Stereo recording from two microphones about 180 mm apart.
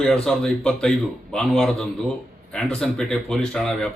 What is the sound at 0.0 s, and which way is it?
Speech, 5° left (ahead or behind).